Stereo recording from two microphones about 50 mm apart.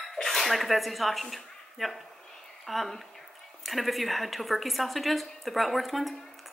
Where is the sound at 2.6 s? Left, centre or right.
Centre.